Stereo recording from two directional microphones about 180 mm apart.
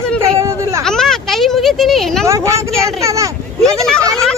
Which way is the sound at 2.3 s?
15° right (ahead or behind).